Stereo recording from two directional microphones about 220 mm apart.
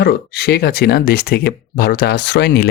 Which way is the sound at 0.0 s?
45° left (ahead or behind).